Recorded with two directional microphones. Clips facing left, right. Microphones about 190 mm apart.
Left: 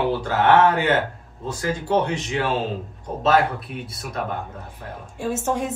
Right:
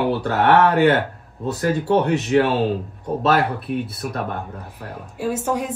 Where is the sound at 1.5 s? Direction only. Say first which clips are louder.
Right 4 dB; 60° right (ahead or behind).